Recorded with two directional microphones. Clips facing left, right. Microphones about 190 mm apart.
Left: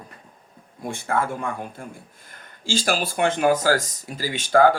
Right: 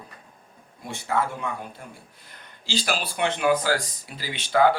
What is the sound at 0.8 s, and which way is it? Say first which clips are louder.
Speech: left 2 dB; 50° left (ahead or behind).